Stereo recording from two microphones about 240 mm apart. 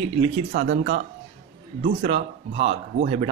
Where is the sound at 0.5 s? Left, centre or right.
Right.